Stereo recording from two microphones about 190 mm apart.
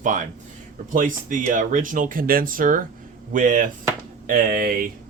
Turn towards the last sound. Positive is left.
turn(degrees=-50)  # may be behind; listen again after turning